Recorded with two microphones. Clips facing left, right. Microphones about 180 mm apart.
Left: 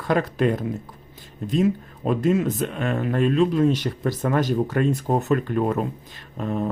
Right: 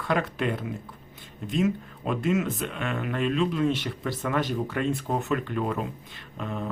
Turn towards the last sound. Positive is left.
turn(degrees=40)  # may be behind; listen again after turning